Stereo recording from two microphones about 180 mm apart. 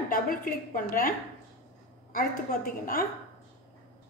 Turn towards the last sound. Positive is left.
turn(degrees=55)  # may be behind; listen again after turning